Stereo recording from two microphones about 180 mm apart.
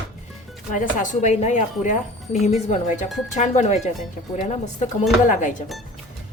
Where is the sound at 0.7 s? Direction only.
45° left (ahead or behind).